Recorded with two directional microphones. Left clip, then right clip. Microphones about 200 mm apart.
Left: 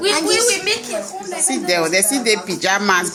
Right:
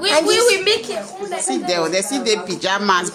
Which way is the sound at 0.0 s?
40° right (ahead or behind).